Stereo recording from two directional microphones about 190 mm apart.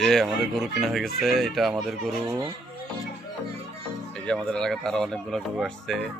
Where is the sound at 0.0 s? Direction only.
Centre (ahead or behind).